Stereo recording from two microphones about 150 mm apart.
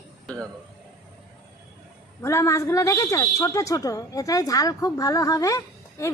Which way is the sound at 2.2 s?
20° left (ahead or behind).